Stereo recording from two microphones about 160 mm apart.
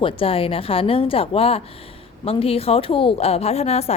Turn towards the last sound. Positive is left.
turn(degrees=40)  # may be behind; listen again after turning